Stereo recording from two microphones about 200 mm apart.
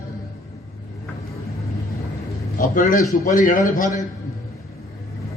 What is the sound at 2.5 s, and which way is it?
A man's voice, 40° left (ahead or behind).